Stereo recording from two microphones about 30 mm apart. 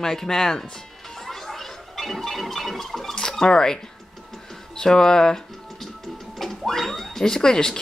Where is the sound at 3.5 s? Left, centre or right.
Left.